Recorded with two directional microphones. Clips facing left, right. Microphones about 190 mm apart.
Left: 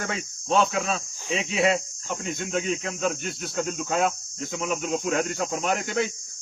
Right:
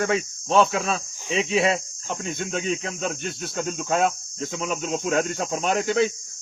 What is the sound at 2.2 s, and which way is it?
Speech, 25° right (ahead or behind).